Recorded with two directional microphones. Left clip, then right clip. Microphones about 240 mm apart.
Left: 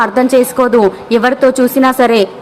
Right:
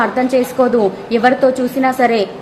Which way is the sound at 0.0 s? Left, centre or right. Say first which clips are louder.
Left 5 dB; centre.